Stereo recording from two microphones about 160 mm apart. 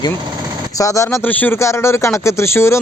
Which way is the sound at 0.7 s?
20° left (ahead or behind).